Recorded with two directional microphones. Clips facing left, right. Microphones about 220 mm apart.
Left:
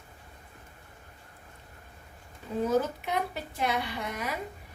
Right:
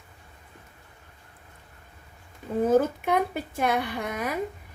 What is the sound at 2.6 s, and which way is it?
A woman's voice, 50° right (ahead or behind).